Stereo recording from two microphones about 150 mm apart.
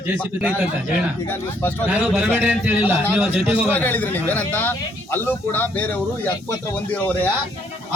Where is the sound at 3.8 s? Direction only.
10° left (ahead or behind).